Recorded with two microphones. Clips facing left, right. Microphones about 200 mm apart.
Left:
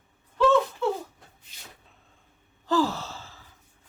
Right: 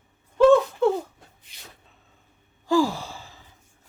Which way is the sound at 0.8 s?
50° right (ahead or behind).